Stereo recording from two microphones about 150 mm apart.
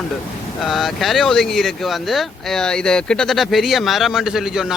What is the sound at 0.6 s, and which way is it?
Speech, centre (ahead or behind).